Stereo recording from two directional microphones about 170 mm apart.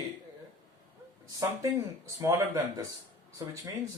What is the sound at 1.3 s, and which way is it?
Speech, 20° right (ahead or behind).